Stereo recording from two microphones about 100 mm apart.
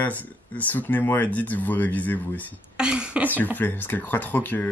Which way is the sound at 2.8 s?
10° right (ahead or behind).